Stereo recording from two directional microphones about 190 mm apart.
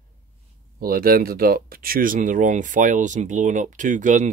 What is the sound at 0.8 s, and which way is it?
Speech, 50° right (ahead or behind).